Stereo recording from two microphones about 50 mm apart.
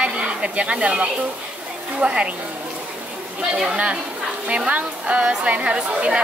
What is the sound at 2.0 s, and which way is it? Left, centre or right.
Speech, right.